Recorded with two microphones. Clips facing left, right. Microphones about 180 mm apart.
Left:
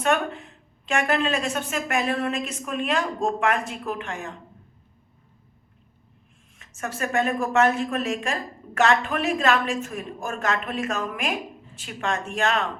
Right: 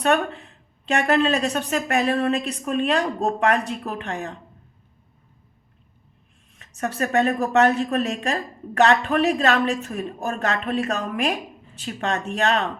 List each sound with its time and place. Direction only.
0.0 s a woman's voice: 35° right (ahead or behind)
6.6 s a woman's voice: 35° right (ahead or behind)